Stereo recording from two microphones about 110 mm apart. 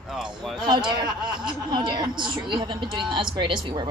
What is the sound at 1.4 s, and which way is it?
Speech, 45° right (ahead or behind).